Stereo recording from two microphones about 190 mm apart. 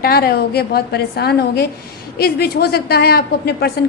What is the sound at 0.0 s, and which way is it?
A woman's voice, 55° left (ahead or behind).